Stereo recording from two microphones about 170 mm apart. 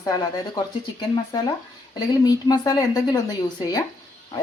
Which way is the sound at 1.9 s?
25° left (ahead or behind).